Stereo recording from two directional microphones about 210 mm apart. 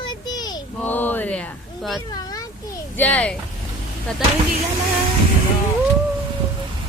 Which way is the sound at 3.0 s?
5° left (ahead or behind).